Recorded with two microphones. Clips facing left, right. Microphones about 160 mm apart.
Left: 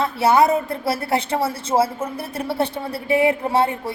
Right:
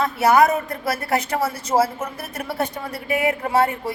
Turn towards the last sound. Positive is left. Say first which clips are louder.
# even
turn(degrees=30)  # may be behind; listen again after turning